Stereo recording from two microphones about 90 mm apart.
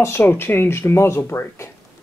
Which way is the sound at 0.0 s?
25° left (ahead or behind).